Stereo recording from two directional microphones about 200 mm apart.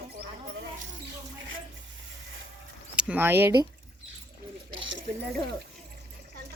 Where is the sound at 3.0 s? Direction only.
10° right (ahead or behind).